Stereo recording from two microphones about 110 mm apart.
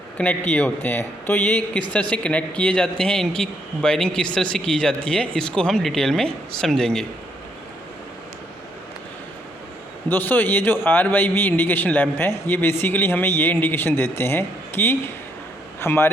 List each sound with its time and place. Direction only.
0.2 s a man's voice: 10° left (ahead or behind)
10.1 s a man's voice: 15° left (ahead or behind)